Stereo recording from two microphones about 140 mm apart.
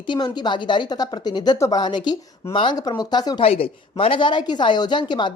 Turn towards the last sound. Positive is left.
turn(degrees=35)  # may be behind; listen again after turning